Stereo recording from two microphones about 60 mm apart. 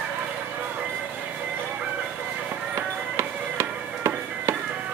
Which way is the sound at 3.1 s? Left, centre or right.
Right.